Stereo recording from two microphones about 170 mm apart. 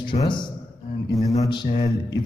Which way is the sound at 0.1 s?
25° left (ahead or behind).